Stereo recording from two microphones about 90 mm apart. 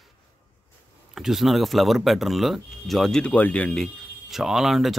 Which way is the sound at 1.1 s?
5° right (ahead or behind).